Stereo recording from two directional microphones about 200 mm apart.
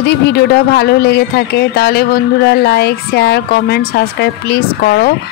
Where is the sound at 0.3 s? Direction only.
55° left (ahead or behind).